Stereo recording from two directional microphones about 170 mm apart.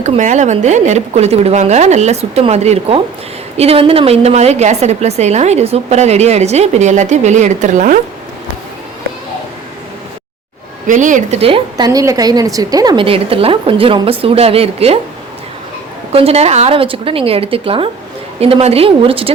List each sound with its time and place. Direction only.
0.0 s a woman's voice: 45° right (ahead or behind)
10.8 s a woman's voice: 50° right (ahead or behind); by 11.9 s 35° right (ahead or behind)
11.9 s a woman's voice: 20° right (ahead or behind); by 14.9 s 35° right (ahead or behind)
16.1 s a woman's voice: 35° right (ahead or behind)